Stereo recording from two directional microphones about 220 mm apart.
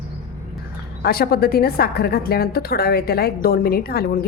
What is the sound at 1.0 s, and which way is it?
A woman's voice, 45° left (ahead or behind).